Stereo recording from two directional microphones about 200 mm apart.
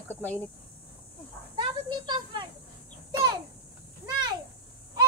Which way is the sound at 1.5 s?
25° right (ahead or behind).